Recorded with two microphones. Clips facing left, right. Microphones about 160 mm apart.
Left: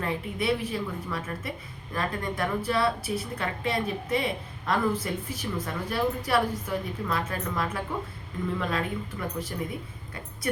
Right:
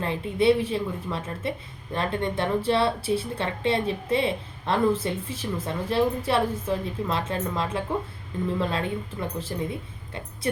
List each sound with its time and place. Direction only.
0.0 s a woman's voice: 30° right (ahead or behind)